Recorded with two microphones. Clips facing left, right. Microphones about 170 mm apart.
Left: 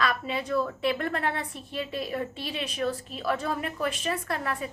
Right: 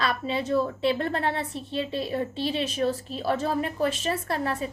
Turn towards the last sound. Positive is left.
turn(degrees=-30)  # may be behind; listen again after turning